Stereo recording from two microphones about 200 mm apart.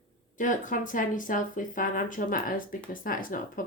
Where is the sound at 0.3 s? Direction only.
40° left (ahead or behind).